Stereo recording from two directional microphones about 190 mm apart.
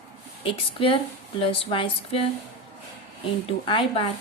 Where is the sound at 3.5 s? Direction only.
30° left (ahead or behind).